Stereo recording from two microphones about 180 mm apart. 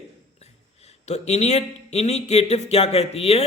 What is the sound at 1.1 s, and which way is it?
A man's voice, 40° left (ahead or behind).